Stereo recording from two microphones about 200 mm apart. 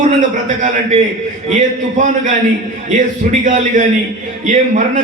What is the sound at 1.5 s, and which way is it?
Speech, 40° right (ahead or behind).